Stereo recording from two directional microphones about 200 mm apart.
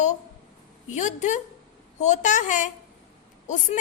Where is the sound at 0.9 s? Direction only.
35° left (ahead or behind).